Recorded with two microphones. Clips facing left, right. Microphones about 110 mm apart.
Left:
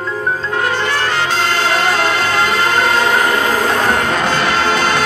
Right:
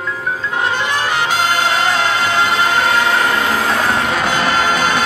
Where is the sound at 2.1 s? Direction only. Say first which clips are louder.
Even; 15° right (ahead or behind).